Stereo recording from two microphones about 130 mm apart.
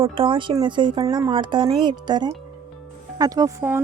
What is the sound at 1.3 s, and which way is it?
Speech, 40° right (ahead or behind).